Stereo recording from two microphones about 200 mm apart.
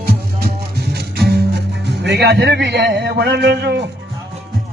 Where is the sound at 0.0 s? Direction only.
50° right (ahead or behind).